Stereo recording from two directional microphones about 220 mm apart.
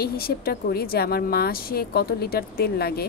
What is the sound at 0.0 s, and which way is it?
A woman's voice, 45° left (ahead or behind).